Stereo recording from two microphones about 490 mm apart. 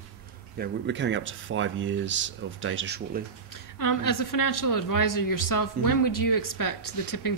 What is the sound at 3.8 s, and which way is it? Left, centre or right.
A woman's voice, left.